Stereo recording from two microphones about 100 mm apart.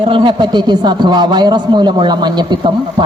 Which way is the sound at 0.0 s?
60° right (ahead or behind).